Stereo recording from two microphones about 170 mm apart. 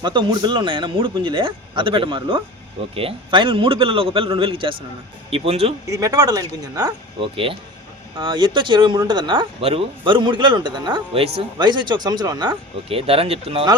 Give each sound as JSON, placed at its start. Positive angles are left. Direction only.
{"t": 0.0, "sound": "a man's voice", "side_deg": -30}
{"t": 5.9, "sound": "speech", "side_deg": -20}